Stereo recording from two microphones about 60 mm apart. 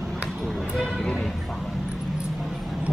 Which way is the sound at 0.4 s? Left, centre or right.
Centre.